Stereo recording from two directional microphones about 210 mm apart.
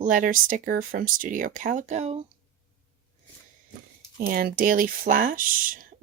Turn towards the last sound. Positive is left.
turn(degrees=-40)  # may be behind; listen again after turning